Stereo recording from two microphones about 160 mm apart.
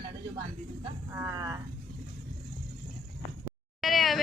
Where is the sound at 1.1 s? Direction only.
20° right (ahead or behind).